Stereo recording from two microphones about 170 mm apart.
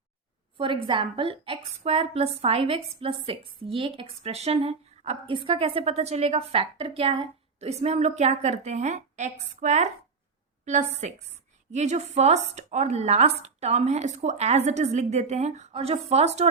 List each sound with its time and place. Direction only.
0.5 s a woman's voice: 30° right (ahead or behind)
10.9 s a woman's voice: 40° right (ahead or behind)